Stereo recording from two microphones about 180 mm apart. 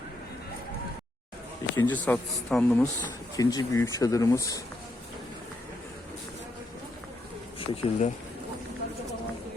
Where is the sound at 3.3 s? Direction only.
20° left (ahead or behind).